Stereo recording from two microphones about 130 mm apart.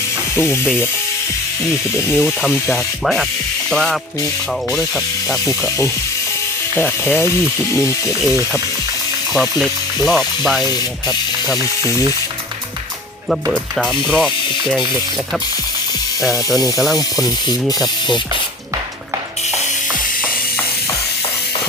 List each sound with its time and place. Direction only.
0.3 s speech: 20° left (ahead or behind)
2.1 s speech: 5° right (ahead or behind)
5.5 s speech: 20° left (ahead or behind)
9.3 s speech: centre (ahead or behind)
13.3 s speech: centre (ahead or behind)
16.2 s speech: centre (ahead or behind)
16.6 s speech: 25° left (ahead or behind)
16.8 s speech: centre (ahead or behind)
17.2 s speech: 30° left (ahead or behind)